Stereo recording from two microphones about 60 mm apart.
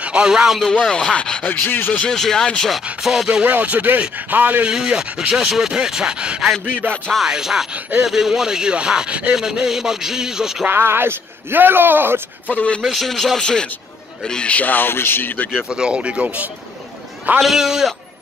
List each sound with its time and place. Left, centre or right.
0.0 s speech: centre
0.6 s speech: centre
1.5 s speech: left
2.0 s speech: centre
3.0 s speech: centre
3.4 s speech: right
4.6 s speech: centre
6.8 s speech: right
7.2 s speech: centre
10.7 s speech: right
12.4 s speech: left
12.8 s speech: centre; by 15.5 s left
15.7 s speech: centre
17.4 s speech: centre